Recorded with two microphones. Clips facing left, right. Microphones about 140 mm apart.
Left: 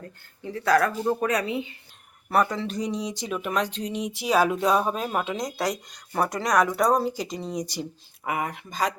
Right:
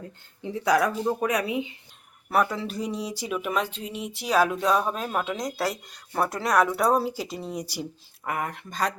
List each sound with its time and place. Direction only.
0.4 s speech: 20° right (ahead or behind)
2.3 s speech: 5° right (ahead or behind)
8.2 s speech: 5° left (ahead or behind)